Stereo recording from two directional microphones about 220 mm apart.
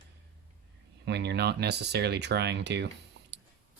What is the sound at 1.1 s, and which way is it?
Speech, 50° right (ahead or behind).